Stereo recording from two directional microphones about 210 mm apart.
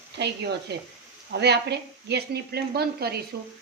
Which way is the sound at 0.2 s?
55° right (ahead or behind).